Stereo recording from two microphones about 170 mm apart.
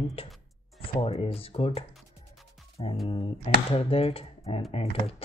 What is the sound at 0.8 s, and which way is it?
Speech, 35° left (ahead or behind).